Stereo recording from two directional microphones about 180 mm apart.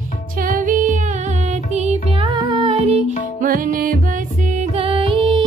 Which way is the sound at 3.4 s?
50° right (ahead or behind).